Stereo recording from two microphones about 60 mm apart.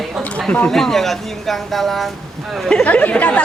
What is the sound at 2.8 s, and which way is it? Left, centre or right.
Speech, left.